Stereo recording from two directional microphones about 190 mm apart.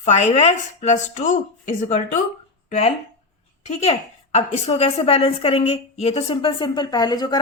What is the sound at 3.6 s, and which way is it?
A woman's voice, 35° left (ahead or behind).